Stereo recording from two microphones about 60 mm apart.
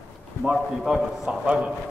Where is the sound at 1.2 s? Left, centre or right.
Right.